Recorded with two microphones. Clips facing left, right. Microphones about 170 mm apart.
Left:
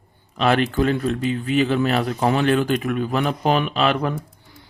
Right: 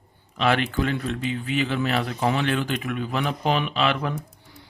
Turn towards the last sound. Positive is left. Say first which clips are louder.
# left 4 dB
turn(degrees=45)  # may be behind; listen again after turning